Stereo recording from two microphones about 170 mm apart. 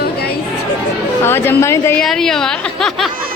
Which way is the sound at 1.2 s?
15° left (ahead or behind).